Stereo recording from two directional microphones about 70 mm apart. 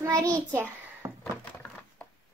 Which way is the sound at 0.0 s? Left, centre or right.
Right.